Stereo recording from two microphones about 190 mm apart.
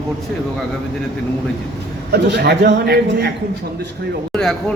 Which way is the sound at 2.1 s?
60° right (ahead or behind).